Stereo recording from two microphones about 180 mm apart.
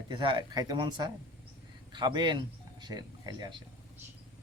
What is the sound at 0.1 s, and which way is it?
Speech, 30° right (ahead or behind).